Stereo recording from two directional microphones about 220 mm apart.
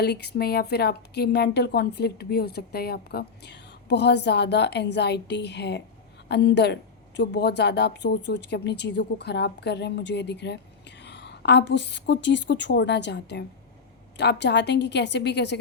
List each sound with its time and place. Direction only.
0.0 s speech: 50° left (ahead or behind)